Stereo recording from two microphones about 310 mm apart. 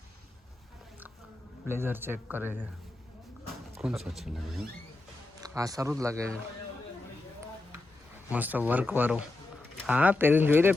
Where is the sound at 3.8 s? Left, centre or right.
Centre.